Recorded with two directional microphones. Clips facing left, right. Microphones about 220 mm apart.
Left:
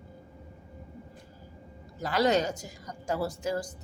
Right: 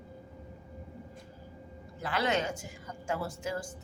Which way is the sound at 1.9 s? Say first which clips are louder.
Left 5 dB; 40° left (ahead or behind).